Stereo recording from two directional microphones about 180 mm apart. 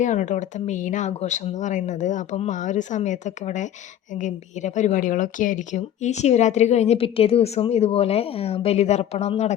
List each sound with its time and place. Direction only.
0.0 s speech: 45° left (ahead or behind)